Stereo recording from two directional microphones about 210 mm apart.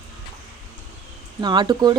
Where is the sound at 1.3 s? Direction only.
20° right (ahead or behind).